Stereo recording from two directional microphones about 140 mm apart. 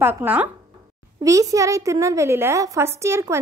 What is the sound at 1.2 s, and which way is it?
A woman's voice, 25° right (ahead or behind).